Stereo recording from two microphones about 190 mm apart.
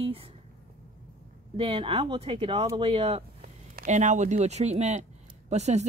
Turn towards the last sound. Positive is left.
turn(degrees=-35)  # may be behind; listen again after turning